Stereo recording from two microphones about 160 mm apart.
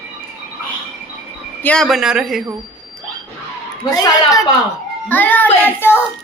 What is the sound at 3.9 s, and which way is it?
Speech, 20° left (ahead or behind).